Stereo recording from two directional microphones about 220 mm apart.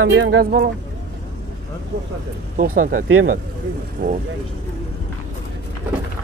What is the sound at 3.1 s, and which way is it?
Speech, 70° right (ahead or behind).